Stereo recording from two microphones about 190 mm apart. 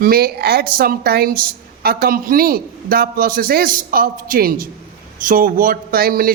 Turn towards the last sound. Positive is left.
turn(degrees=-50)  # may be behind; listen again after turning